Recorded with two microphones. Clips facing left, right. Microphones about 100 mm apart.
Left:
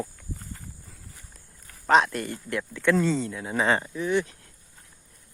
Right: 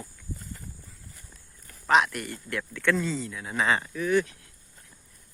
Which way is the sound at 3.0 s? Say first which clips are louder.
Left 5 dB; 35° left (ahead or behind).